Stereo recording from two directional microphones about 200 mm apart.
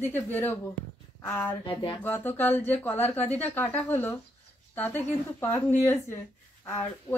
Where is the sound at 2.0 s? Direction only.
10° left (ahead or behind).